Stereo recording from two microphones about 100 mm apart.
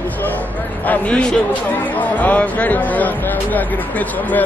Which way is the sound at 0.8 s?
15° left (ahead or behind).